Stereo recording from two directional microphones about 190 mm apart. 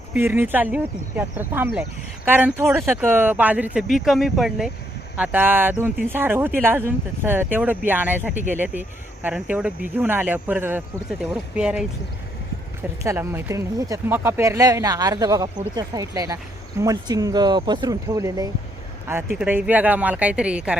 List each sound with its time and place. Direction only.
0.1 s speech: 10° right (ahead or behind)
13.0 s speech: 15° right (ahead or behind)